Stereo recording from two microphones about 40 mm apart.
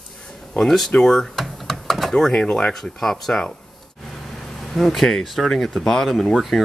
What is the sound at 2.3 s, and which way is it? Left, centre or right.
Speech, left.